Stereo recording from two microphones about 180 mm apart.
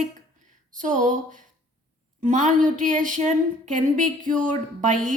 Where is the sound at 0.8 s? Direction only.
45° right (ahead or behind).